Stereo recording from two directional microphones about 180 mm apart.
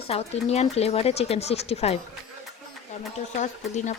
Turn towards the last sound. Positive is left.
turn(degrees=40)  # may be behind; listen again after turning